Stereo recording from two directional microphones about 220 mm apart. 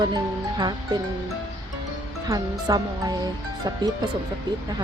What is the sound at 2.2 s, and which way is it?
Speech, 15° right (ahead or behind).